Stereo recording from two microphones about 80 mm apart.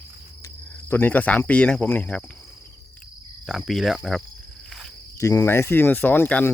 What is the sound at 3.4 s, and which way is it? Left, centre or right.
Speech, centre.